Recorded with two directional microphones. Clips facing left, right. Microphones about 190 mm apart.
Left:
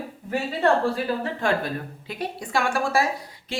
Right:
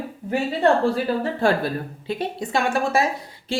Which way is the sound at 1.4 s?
30° right (ahead or behind).